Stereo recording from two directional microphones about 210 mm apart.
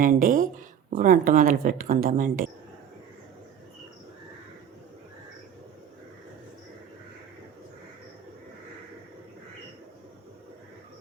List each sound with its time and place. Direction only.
0.0 s speech: 40° right (ahead or behind)